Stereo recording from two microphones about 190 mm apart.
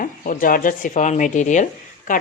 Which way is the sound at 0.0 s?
45° left (ahead or behind).